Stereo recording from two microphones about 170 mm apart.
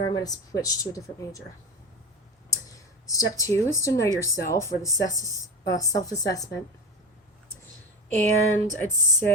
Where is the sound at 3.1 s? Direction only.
20° left (ahead or behind).